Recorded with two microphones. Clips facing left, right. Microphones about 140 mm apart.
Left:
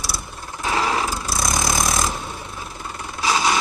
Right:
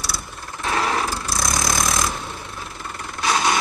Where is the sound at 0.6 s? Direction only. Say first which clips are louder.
Left 1 dB; 5° left (ahead or behind).